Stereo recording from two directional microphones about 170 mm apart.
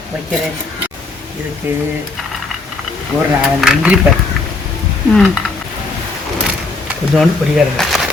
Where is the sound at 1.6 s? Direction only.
10° right (ahead or behind).